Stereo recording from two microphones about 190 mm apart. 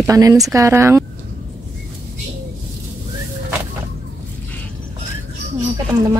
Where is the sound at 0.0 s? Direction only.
20° right (ahead or behind).